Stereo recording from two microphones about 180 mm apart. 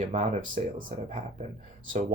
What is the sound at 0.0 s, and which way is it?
Speech, 45° right (ahead or behind).